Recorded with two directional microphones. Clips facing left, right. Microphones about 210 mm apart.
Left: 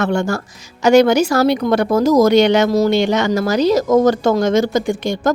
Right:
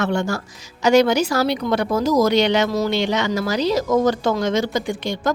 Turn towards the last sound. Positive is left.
turn(degrees=45)  # may be behind; listen again after turning